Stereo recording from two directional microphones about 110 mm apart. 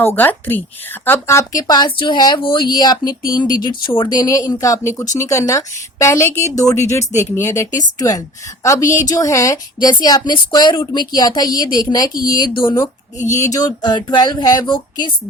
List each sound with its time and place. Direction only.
0.0 s a woman's voice: 20° left (ahead or behind); by 15.1 s 40° left (ahead or behind)